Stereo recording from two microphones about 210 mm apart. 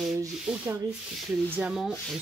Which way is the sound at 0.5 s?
5° right (ahead or behind).